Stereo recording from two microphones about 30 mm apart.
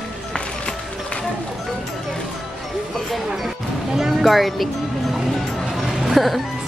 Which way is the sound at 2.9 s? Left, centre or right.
Centre.